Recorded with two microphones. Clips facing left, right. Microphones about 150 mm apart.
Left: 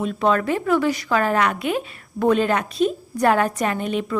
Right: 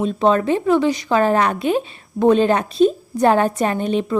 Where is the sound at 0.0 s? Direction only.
25° right (ahead or behind).